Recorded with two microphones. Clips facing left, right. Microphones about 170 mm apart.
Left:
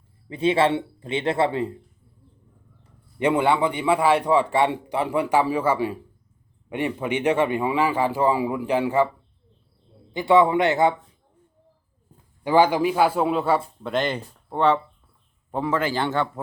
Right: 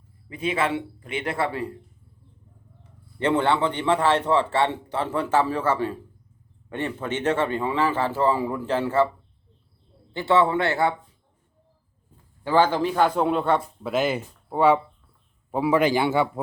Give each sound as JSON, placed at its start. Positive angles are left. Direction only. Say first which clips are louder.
{"t": 0.3, "sound": "speech", "louder": "left 5 dB", "side_deg": 30}
{"t": 3.2, "sound": "a man's voice", "louder": "left 1 dB", "side_deg": 10}
{"t": 10.1, "sound": "a man's voice", "louder": "left 3 dB", "side_deg": 15}
{"t": 12.4, "sound": "a man's voice", "louder": "left 2 dB", "side_deg": 15}